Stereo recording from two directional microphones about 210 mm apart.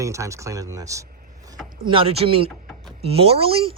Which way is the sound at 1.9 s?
25° right (ahead or behind).